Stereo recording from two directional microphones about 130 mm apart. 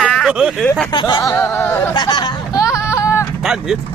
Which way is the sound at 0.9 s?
35° left (ahead or behind).